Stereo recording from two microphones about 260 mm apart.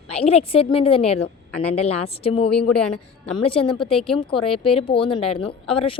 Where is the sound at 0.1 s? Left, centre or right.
Left.